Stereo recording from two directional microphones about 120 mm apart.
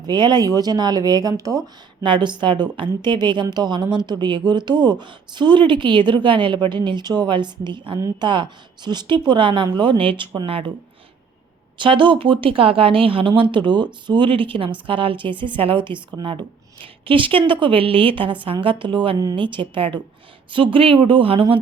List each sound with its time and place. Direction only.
0.0 s speech: 35° right (ahead or behind)
2.0 s speech: 40° right (ahead or behind)
11.8 s speech: 40° right (ahead or behind)